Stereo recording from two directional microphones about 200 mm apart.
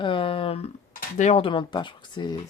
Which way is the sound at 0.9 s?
35° left (ahead or behind).